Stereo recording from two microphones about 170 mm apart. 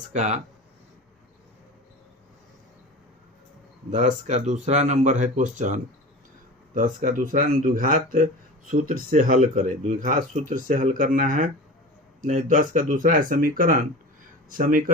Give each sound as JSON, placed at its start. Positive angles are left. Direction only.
{"t": 0.1, "sound": "speech", "side_deg": -45}
{"t": 3.8, "sound": "speech", "side_deg": -45}